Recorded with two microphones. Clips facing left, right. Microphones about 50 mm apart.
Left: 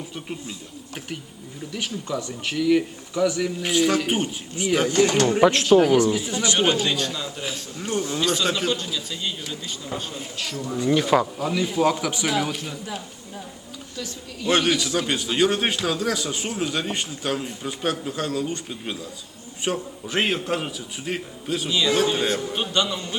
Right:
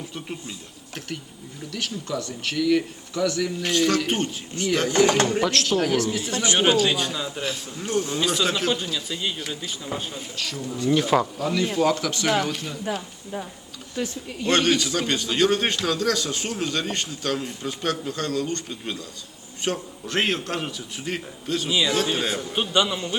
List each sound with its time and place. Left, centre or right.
0.1 s speech: centre
1.7 s a man's voice: centre
4.9 s speech: right
5.4 s a man's voice: centre
6.8 s speech: centre
7.8 s a man's voice: centre
8.1 s speech: centre
10.9 s a man's voice: centre
14.4 s a man's voice: centre
22.7 s speech: centre